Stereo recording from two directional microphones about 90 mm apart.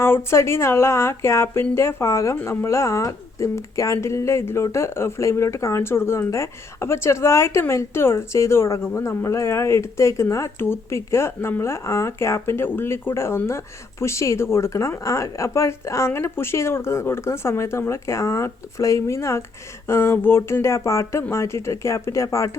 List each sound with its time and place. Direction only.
0.0 s speech: 25° left (ahead or behind)